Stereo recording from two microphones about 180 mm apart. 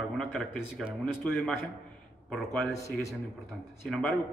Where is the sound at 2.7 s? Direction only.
15° left (ahead or behind).